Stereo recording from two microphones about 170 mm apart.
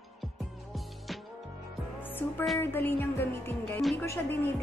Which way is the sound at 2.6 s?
10° left (ahead or behind).